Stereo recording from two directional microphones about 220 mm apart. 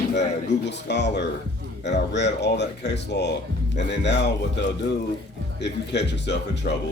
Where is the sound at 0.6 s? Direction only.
50° left (ahead or behind).